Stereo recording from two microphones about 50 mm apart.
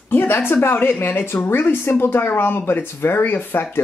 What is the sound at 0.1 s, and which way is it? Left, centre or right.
Speech, left.